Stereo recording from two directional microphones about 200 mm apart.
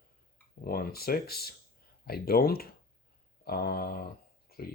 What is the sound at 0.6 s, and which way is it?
Speech, 50° left (ahead or behind).